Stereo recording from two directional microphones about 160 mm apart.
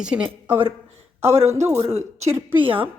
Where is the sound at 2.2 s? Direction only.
20° right (ahead or behind).